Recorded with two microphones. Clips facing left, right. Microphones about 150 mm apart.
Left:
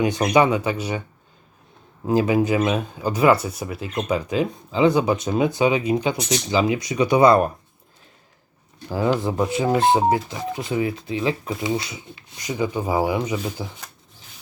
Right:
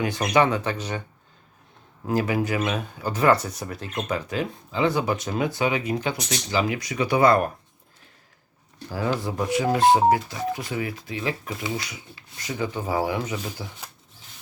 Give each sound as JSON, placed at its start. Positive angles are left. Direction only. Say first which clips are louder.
{"t": 0.3, "sound": "speech", "louder": "left 2 dB", "side_deg": 10}
{"t": 2.0, "sound": "speech", "louder": "left 5 dB", "side_deg": 20}
{"t": 8.9, "sound": "speech", "louder": "left 5 dB", "side_deg": 25}